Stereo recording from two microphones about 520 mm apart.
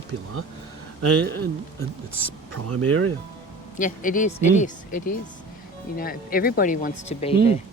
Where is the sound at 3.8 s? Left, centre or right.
Centre.